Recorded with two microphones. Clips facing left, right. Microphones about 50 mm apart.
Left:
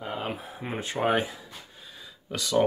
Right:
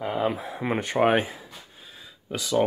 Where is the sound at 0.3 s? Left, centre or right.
Right.